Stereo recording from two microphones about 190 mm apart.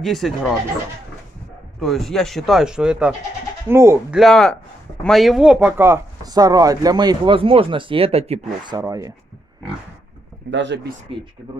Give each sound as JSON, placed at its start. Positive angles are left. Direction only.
{"t": 0.0, "sound": "speech", "side_deg": 0}
{"t": 1.8, "sound": "speech", "side_deg": 0}
{"t": 4.2, "sound": "speech", "side_deg": 5}
{"t": 8.6, "sound": "speech", "side_deg": -20}
{"t": 10.5, "sound": "speech", "side_deg": -70}
{"t": 11.1, "sound": "speech", "side_deg": -30}